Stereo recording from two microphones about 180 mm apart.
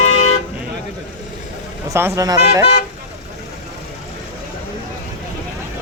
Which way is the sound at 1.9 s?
15° right (ahead or behind).